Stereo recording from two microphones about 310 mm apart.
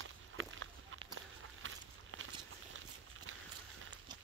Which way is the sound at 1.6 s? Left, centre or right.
Right.